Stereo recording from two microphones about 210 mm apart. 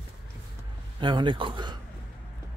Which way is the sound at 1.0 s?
20° right (ahead or behind).